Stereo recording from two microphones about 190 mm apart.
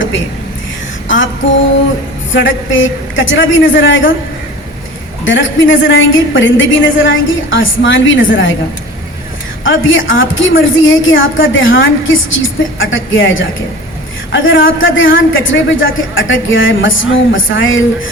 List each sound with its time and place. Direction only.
1.0 s female singing: 80° left
2.3 s a woman's voice: 85° left
5.2 s a woman's voice: 90° left
9.6 s a man's voice: 90° left